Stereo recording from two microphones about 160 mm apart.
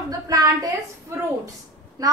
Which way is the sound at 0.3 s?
20° right (ahead or behind).